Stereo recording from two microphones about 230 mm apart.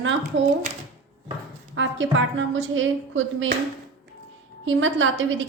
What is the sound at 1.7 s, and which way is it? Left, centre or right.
A woman's voice, right.